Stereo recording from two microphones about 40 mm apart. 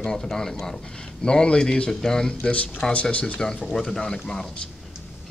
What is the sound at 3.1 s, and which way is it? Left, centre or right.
Speech, left.